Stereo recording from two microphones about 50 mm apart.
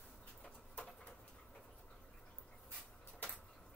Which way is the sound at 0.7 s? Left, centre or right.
Left.